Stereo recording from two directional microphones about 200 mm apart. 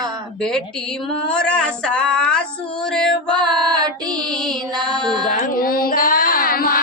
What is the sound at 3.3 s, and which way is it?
Music, 20° right (ahead or behind).